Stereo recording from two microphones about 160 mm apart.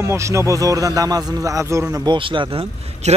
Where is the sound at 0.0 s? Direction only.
20° right (ahead or behind).